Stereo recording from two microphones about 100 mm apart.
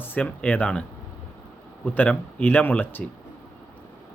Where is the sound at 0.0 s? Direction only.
20° left (ahead or behind).